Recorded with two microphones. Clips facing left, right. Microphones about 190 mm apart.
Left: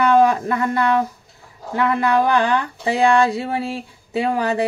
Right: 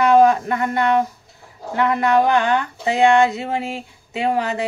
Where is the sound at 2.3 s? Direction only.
35° left (ahead or behind).